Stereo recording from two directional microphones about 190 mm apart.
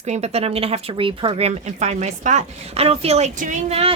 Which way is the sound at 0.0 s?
35° right (ahead or behind).